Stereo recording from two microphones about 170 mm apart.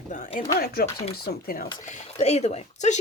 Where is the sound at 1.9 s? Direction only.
45° left (ahead or behind).